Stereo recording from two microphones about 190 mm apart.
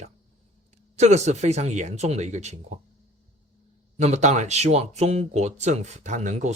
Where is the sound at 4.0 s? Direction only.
35° right (ahead or behind).